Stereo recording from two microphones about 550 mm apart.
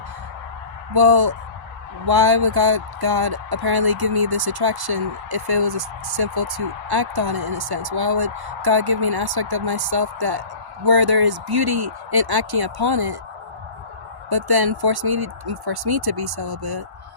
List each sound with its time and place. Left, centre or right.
0.9 s speech: right
14.3 s speech: right